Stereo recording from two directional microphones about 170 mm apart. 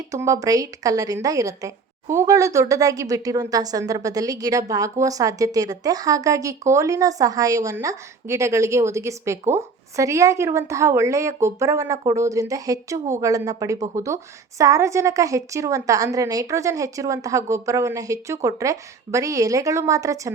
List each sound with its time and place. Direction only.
0.1 s a woman's voice: 20° right (ahead or behind)